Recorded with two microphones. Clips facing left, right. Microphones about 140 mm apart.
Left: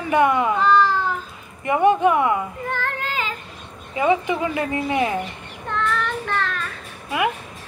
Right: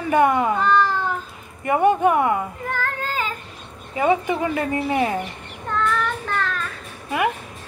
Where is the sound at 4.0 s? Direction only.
40° right (ahead or behind).